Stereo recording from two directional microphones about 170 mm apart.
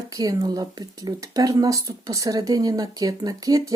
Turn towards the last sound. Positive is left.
turn(degrees=-20)  # may be behind; listen again after turning